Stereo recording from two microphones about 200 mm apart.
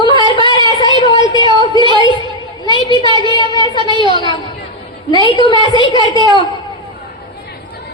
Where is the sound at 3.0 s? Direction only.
25° right (ahead or behind).